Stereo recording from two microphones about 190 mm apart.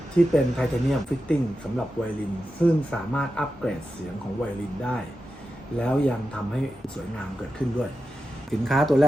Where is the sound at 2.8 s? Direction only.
5° left (ahead or behind).